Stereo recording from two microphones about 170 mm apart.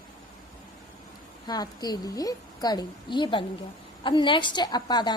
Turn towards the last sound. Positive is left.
turn(degrees=25)  # may be behind; listen again after turning